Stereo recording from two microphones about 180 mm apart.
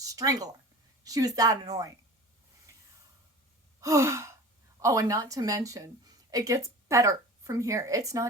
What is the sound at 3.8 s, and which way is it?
A woman's voice, 15° right (ahead or behind).